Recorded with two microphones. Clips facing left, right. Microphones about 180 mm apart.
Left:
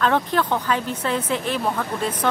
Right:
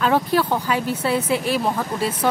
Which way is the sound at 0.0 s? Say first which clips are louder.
Right 2 dB; 10° right (ahead or behind).